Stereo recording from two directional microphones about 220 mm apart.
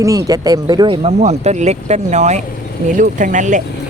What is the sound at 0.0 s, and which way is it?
Speech, 15° right (ahead or behind).